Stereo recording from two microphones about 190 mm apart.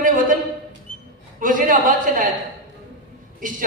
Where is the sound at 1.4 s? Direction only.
45° right (ahead or behind).